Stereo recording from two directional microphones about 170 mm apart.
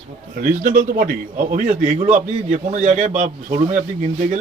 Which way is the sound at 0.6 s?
50° right (ahead or behind).